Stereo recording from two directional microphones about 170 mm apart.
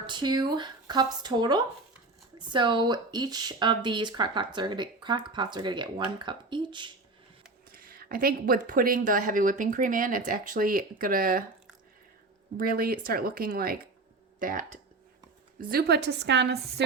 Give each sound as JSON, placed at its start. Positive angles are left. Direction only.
{"t": 0.0, "sound": "speech", "side_deg": -25}
{"t": 7.7, "sound": "speech", "side_deg": -60}
{"t": 12.5, "sound": "speech", "side_deg": -60}
{"t": 15.7, "sound": "a woman's voice", "side_deg": -75}